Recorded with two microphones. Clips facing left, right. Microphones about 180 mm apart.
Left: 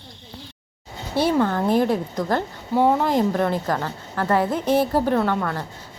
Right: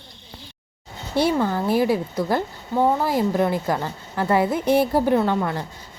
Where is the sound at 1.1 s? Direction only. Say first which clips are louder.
Left 1 dB; 10° right (ahead or behind).